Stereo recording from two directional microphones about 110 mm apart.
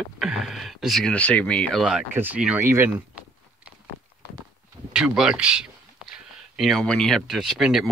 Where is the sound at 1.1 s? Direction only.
10° left (ahead or behind).